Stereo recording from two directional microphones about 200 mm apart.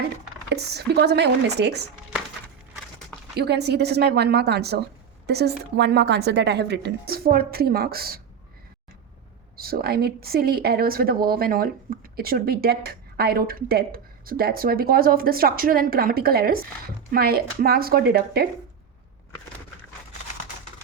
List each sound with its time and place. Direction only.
0.5 s a woman's voice: 55° right (ahead or behind)
3.3 s a woman's voice: 55° right (ahead or behind)
9.6 s a woman's voice: 50° right (ahead or behind)